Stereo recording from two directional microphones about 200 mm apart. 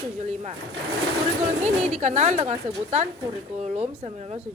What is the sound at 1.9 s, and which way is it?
A woman's voice, 35° right (ahead or behind).